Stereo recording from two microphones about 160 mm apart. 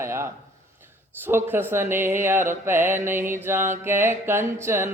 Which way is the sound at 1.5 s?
15° right (ahead or behind).